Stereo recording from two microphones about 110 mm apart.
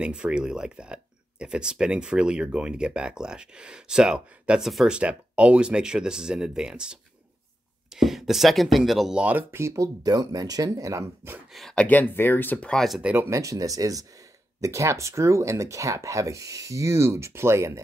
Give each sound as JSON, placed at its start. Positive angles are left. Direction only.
{"t": 0.0, "sound": "speech", "side_deg": -10}
{"t": 9.2, "sound": "speech", "side_deg": -15}
{"t": 11.5, "sound": "speech", "side_deg": 5}
{"t": 12.8, "sound": "speech", "side_deg": 0}
{"t": 13.1, "sound": "speech", "side_deg": -20}
{"t": 13.4, "sound": "speech", "side_deg": -30}